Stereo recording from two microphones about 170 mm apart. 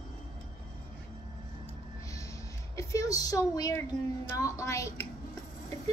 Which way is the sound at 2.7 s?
20° left (ahead or behind).